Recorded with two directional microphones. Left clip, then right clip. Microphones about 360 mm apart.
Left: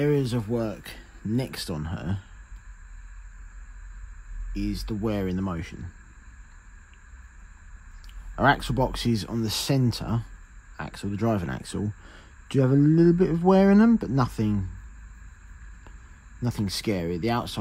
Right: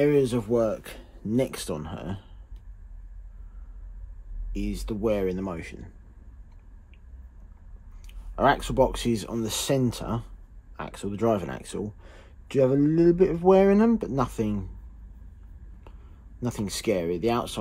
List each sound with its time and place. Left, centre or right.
0.0 s speech: left
4.6 s speech: left
8.4 s speech: left
16.3 s speech: left